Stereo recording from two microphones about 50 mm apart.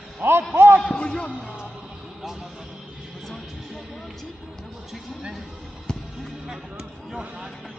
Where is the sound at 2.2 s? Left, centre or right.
Centre.